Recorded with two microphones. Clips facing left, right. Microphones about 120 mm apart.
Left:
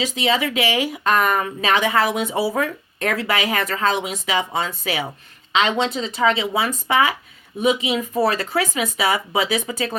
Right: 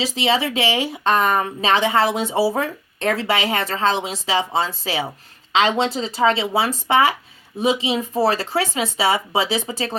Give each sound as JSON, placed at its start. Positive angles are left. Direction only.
{"t": 0.0, "sound": "speech", "side_deg": -30}